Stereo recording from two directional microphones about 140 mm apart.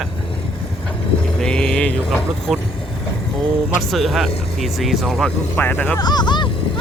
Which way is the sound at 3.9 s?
Centre (ahead or behind).